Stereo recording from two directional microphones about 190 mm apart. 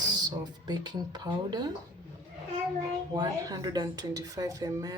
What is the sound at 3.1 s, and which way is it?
Speech, 20° right (ahead or behind).